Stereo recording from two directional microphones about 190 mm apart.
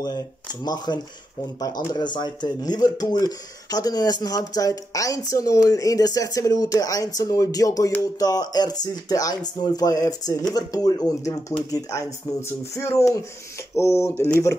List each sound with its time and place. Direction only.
0.0 s speech: 20° left (ahead or behind)